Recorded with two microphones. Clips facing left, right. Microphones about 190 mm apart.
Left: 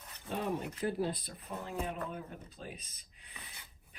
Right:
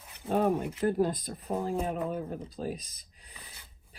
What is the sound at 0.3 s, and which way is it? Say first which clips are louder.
Speech: right 9 dB; 50° right (ahead or behind).